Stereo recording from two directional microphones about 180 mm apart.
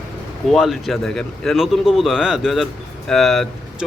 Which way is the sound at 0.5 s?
Centre (ahead or behind).